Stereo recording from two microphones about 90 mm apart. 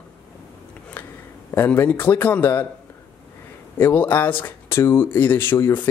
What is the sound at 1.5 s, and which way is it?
Speech, 25° left (ahead or behind).